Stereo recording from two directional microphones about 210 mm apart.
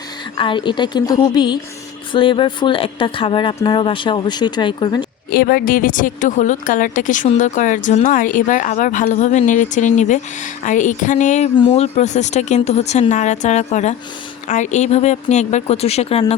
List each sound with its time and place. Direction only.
0.3 s speech: 25° left (ahead or behind)
5.3 s a woman's voice: 45° left (ahead or behind); by 16.2 s 30° left (ahead or behind)